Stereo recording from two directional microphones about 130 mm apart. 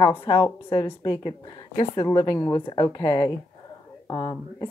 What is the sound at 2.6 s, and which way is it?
Speech, 40° left (ahead or behind).